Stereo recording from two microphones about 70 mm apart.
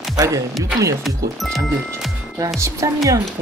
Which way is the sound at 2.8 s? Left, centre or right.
Right.